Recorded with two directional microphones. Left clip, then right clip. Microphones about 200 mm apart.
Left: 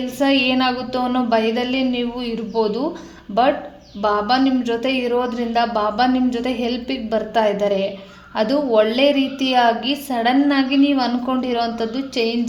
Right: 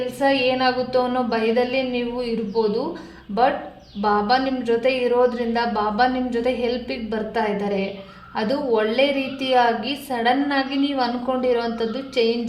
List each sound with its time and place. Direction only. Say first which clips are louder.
0.2 s a woman's voice: left 2 dB; 35° left (ahead or behind)
4.0 s a woman's voice: left 2 dB; 35° left (ahead or behind)